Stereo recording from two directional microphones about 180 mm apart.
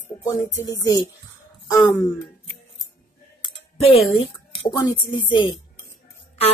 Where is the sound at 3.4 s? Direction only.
35° left (ahead or behind).